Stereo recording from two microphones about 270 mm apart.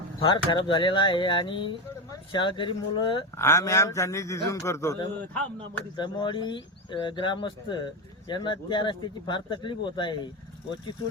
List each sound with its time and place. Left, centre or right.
0.2 s speech: centre